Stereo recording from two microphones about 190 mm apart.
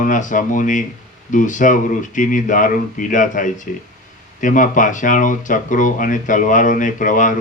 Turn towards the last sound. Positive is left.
turn(degrees=45)  # may be behind; listen again after turning